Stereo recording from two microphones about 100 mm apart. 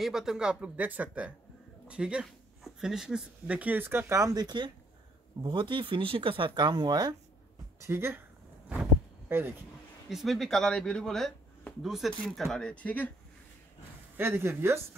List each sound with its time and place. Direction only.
0.0 s speech: 5° right (ahead or behind); by 4.1 s 20° right (ahead or behind)
4.1 s speech: 35° right (ahead or behind)
7.8 s speech: 25° right (ahead or behind)
9.3 s speech: 20° right (ahead or behind)
10.0 s speech: centre (ahead or behind); by 13.1 s 15° left (ahead or behind)
14.1 s speech: 20° right (ahead or behind)